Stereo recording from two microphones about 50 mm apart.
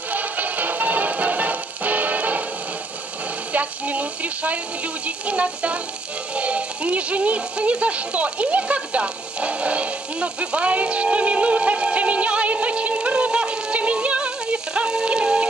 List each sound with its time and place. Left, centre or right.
0.1 s music: right
3.5 s a sound: right
5.0 s speech: right